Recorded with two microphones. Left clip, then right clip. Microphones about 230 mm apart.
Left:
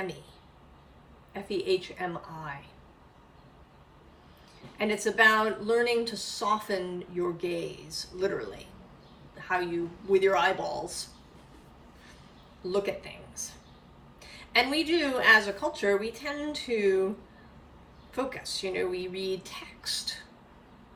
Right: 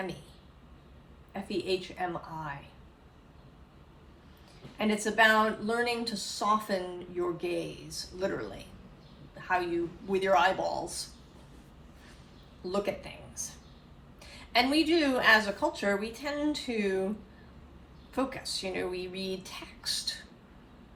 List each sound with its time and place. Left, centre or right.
1.3 s speech: centre
4.8 s a woman's voice: centre
12.7 s a woman's voice: centre
18.1 s a woman's voice: centre